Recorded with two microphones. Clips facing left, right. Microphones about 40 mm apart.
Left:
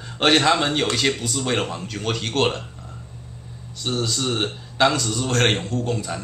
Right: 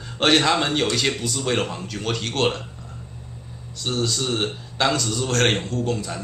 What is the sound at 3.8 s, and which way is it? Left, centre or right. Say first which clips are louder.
A man's voice: even; centre.